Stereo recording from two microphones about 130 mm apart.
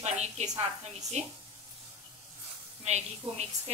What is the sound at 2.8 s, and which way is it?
Speech, 55° right (ahead or behind).